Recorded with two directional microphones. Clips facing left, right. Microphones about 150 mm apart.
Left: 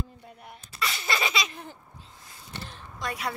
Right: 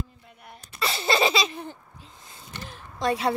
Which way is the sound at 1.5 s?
Centre (ahead or behind).